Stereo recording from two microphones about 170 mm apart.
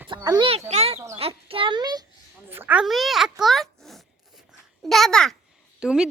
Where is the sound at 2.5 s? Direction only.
10° right (ahead or behind).